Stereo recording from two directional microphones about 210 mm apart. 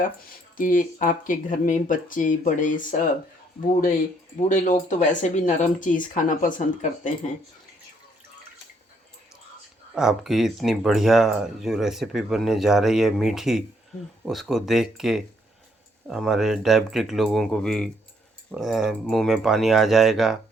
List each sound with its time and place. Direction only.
0.0 s speech: 40° left (ahead or behind)
9.9 s speech: 5° right (ahead or behind)